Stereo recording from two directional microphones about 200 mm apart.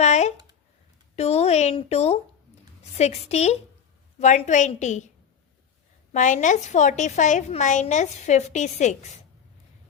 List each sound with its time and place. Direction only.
0.0 s a sound: 35° left (ahead or behind)
1.1 s a woman's voice: 30° left (ahead or behind)
6.1 s a woman's voice: 40° left (ahead or behind)